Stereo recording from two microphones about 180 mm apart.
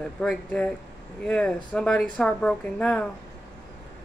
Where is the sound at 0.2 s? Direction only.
5° left (ahead or behind).